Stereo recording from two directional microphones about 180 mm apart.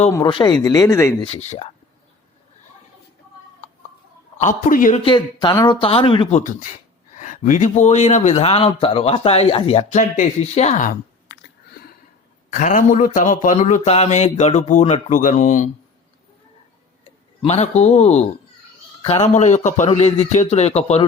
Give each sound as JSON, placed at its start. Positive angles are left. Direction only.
{"t": 0.2, "sound": "speech", "side_deg": 25}
{"t": 1.2, "sound": "a man's voice", "side_deg": 35}
{"t": 4.4, "sound": "speech", "side_deg": 45}
{"t": 5.0, "sound": "speech", "side_deg": 25}
{"t": 6.4, "sound": "a man's voice", "side_deg": 45}
{"t": 12.5, "sound": "speech", "side_deg": 45}
{"t": 17.0, "sound": "a man's voice", "side_deg": 35}